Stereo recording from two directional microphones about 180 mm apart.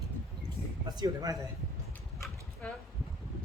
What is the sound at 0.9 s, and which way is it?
Speech, 20° right (ahead or behind).